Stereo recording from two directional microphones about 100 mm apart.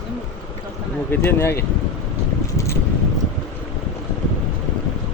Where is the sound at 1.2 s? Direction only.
25° left (ahead or behind).